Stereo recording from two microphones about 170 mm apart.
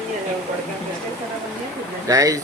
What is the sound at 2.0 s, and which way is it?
Speech, 20° right (ahead or behind).